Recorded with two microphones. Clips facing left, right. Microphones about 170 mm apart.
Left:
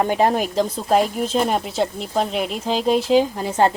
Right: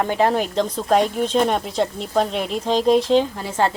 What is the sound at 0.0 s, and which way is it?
Speech, 15° left (ahead or behind).